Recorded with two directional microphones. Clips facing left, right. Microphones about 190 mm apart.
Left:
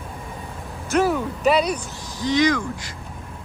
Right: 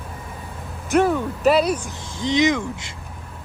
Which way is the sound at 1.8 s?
25° right (ahead or behind).